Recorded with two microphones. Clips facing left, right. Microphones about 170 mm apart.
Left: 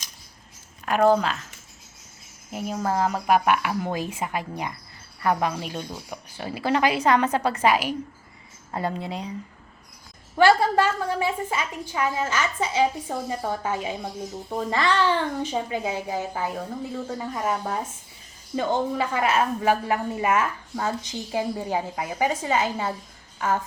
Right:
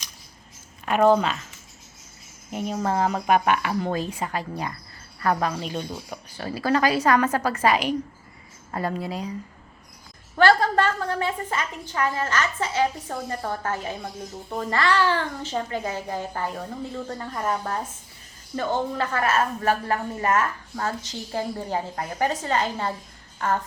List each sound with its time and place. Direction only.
0.9 s speech: centre (ahead or behind)
2.5 s a woman's voice: 5° left (ahead or behind)
7.7 s speech: 5° left (ahead or behind)
8.7 s a woman's voice: 20° left (ahead or behind)
10.3 s a woman's voice: 10° left (ahead or behind)